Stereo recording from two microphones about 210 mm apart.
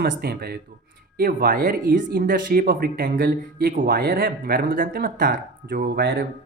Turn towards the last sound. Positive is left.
turn(degrees=-45)  # may be behind; listen again after turning